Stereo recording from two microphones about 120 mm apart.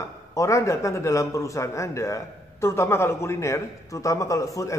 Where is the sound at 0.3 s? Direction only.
25° left (ahead or behind).